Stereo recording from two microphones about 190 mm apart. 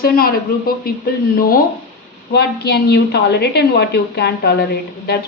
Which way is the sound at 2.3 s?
60° left (ahead or behind).